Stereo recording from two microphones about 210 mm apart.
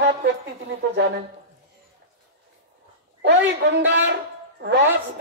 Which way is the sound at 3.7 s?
60° right (ahead or behind).